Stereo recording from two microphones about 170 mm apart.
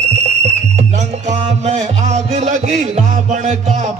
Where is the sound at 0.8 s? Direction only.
40° right (ahead or behind).